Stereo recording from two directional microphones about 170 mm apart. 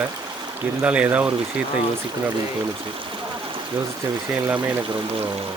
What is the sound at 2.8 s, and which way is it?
Stream, 30° right (ahead or behind).